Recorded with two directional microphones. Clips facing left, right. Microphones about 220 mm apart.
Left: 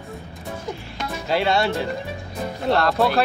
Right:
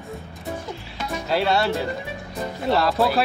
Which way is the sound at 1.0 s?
Centre (ahead or behind).